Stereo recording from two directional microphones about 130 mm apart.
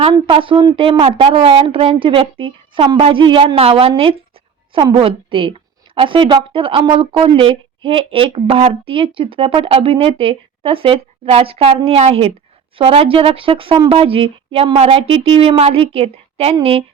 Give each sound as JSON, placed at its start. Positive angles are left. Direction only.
{"t": 0.0, "sound": "a woman's voice", "side_deg": -45}